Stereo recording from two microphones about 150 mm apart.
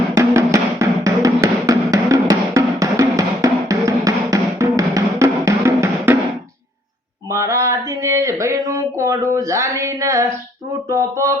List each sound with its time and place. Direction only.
0.1 s music: 20° right (ahead or behind)
7.3 s a sound: 20° right (ahead or behind)
10.8 s speech: 20° right (ahead or behind)